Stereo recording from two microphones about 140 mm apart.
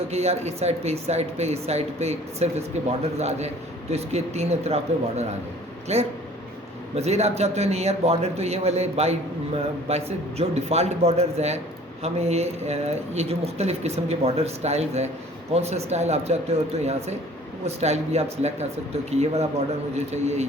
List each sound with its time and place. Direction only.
0.1 s speech: 50° right (ahead or behind)